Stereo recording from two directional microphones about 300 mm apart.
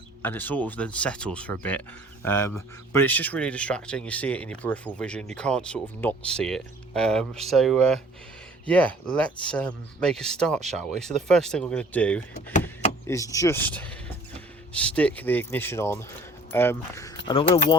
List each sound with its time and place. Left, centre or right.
0.2 s speech: centre